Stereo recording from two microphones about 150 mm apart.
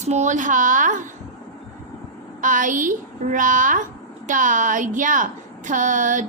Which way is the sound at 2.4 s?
60° right (ahead or behind).